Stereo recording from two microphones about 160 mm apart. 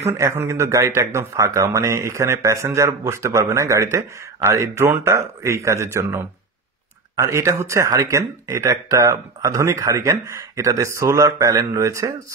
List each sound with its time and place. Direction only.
0.2 s a man's voice: 15° right (ahead or behind)